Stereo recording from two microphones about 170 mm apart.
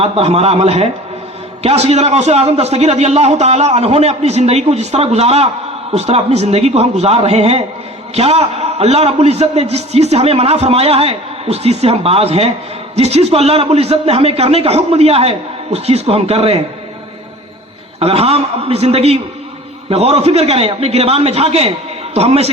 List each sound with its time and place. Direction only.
0.0 s a man's voice: 35° right (ahead or behind)
18.0 s a man's voice: 35° right (ahead or behind)